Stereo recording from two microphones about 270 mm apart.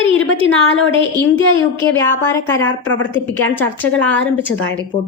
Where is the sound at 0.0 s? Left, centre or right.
Left.